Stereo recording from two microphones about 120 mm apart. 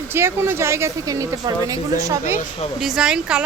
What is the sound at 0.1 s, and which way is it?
A woman's voice, 20° right (ahead or behind).